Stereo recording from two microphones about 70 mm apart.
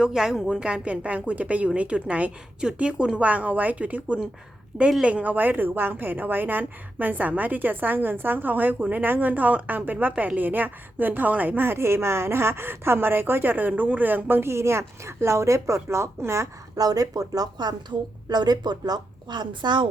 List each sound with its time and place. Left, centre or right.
0.0 s a woman's voice: centre
0.6 s a woman's voice: centre; by 16.5 s right
16.7 s speech: right
18.3 s a woman's voice: right